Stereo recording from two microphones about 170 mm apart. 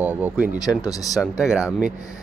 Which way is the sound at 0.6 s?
20° left (ahead or behind).